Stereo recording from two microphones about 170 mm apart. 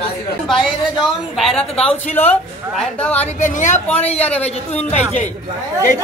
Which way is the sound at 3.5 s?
45° left (ahead or behind).